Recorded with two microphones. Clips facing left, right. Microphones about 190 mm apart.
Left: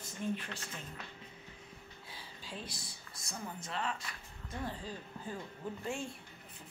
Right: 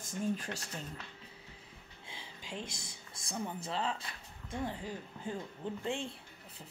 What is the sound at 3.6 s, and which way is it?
Speech, 30° right (ahead or behind).